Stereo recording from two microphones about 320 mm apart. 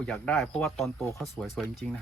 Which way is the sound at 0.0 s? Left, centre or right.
Centre.